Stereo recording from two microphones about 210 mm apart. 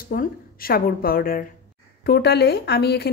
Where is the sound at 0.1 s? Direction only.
45° left (ahead or behind).